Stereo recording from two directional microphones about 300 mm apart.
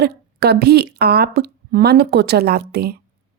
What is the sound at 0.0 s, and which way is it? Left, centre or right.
Speech, right.